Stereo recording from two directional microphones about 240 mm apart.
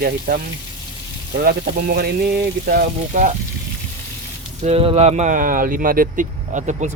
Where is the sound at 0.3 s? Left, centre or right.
Right.